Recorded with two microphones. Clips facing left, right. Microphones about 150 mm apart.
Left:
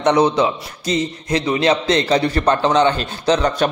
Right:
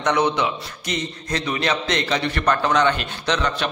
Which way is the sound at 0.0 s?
30° left (ahead or behind).